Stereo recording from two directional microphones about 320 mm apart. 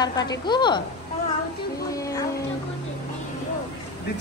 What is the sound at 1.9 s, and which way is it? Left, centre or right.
Music, centre.